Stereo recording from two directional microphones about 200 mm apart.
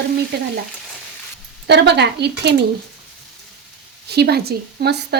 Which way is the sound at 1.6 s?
55° right (ahead or behind).